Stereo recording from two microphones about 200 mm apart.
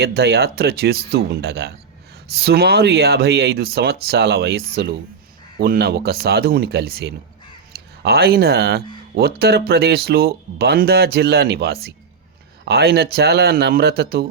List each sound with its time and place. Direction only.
0.0 s speech: 55° right (ahead or behind)